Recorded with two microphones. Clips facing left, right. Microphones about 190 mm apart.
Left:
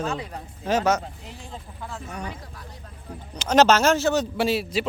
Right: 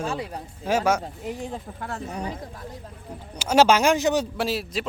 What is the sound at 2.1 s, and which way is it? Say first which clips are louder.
Speech: right 3 dB; 30° right (ahead or behind).